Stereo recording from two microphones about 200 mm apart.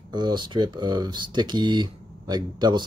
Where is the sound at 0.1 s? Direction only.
20° right (ahead or behind).